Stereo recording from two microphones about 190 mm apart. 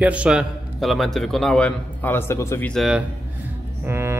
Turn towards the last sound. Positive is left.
turn(degrees=-10)  # may be behind; listen again after turning